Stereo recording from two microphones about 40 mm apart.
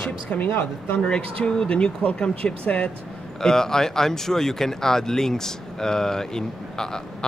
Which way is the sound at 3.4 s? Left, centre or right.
Centre.